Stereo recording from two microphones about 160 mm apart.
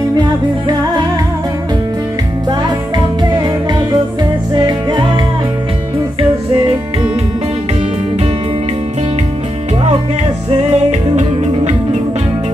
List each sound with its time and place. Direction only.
4.6 s music: 25° right (ahead or behind)
10.5 s music: 45° right (ahead or behind)